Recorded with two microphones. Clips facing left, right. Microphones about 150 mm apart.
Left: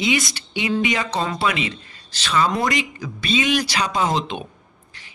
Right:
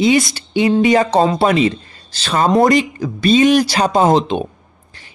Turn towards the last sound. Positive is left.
turn(degrees=-35)  # may be behind; listen again after turning